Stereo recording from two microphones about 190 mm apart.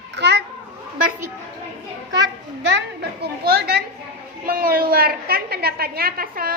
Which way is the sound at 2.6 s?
65° right (ahead or behind).